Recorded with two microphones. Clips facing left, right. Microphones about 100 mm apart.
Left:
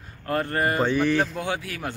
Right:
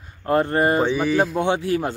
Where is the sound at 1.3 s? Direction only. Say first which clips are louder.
Right 9 dB; 25° right (ahead or behind).